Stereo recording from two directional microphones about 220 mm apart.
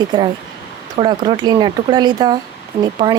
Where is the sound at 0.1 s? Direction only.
20° right (ahead or behind).